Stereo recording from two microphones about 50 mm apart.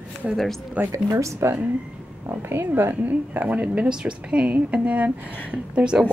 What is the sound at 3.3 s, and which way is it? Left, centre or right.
Speech, right.